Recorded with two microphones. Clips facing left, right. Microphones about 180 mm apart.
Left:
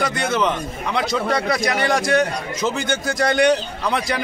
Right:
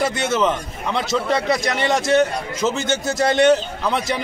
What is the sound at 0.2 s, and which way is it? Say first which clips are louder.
Speech: right 1 dB; 5° right (ahead or behind).